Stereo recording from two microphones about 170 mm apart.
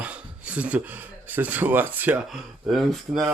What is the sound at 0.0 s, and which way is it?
Speech, 5° right (ahead or behind).